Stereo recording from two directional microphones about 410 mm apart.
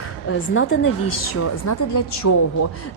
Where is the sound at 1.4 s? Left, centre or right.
Left.